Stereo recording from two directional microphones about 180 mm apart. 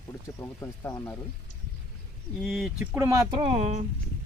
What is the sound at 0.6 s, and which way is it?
Speech, 15° left (ahead or behind).